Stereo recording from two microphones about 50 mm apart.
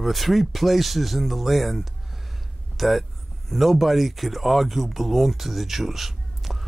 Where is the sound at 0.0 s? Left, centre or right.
Centre.